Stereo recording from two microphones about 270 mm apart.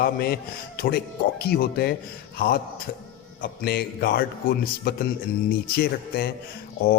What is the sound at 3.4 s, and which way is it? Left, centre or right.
Speech, left.